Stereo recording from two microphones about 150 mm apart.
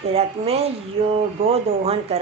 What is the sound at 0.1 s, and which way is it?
A woman's voice, 45° right (ahead or behind).